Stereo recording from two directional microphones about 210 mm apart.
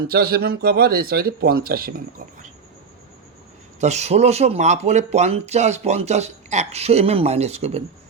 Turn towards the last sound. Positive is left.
turn(degrees=-30)  # may be behind; listen again after turning